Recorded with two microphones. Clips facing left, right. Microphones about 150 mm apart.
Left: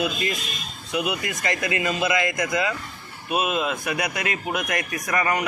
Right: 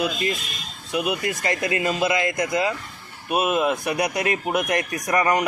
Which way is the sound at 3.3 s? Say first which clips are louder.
Right 3 dB; 45° right (ahead or behind).